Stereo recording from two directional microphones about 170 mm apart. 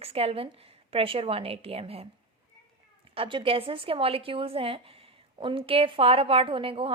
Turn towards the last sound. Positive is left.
turn(degrees=-30)  # may be behind; listen again after turning